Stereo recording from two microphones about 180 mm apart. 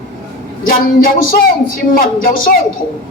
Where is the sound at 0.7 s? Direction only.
50° left (ahead or behind).